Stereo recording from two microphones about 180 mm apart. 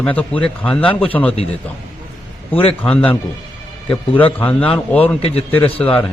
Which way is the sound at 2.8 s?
5° left (ahead or behind).